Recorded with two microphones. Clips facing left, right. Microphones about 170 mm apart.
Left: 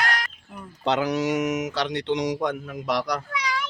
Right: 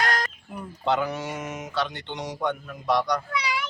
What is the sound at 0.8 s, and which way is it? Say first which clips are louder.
Speech: left 3 dB; 80° left.